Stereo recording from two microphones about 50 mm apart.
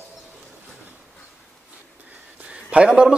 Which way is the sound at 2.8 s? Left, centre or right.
Centre.